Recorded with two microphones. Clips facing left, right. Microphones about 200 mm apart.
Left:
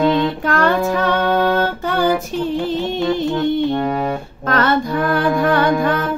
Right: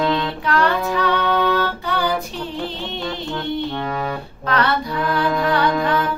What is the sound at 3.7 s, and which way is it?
Music, 25° left (ahead or behind).